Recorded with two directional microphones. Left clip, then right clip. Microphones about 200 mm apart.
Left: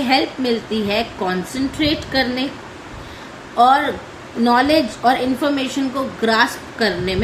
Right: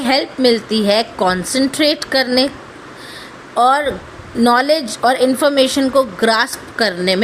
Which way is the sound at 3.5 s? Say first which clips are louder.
Even; 50° right (ahead or behind).